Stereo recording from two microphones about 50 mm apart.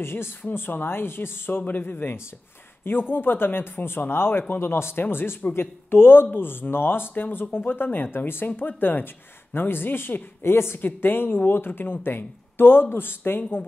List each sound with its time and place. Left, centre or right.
0.0 s speech: left
0.4 s speech: left
10.8 s speech: left